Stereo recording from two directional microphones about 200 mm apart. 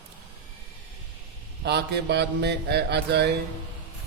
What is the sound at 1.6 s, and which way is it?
Speech, 55° right (ahead or behind).